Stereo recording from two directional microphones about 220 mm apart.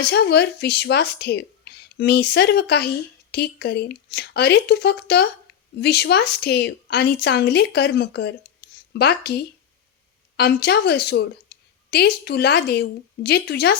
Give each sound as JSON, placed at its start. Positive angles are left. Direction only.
{"t": 0.0, "sound": "a woman's voice", "side_deg": 50}
{"t": 10.3, "sound": "a woman's voice", "side_deg": 45}